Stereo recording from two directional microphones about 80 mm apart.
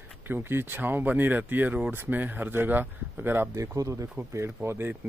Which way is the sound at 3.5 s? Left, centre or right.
Right.